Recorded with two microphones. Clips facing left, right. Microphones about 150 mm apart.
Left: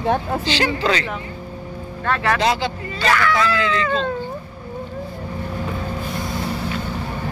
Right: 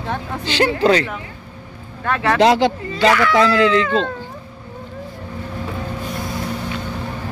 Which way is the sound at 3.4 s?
80° right.